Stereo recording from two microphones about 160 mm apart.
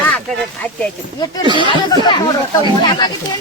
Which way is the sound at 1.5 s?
30° right (ahead or behind).